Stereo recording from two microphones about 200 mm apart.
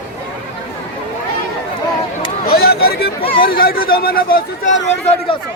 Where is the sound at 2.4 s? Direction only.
50° left (ahead or behind).